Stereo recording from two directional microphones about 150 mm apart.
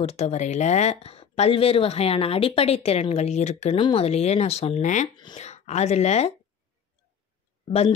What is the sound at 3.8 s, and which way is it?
Speech, 40° left (ahead or behind).